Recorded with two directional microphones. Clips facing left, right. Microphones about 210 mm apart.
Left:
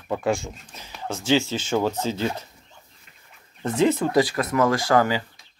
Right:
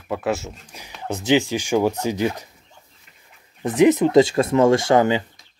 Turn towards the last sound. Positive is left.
turn(degrees=-20)  # may be behind; listen again after turning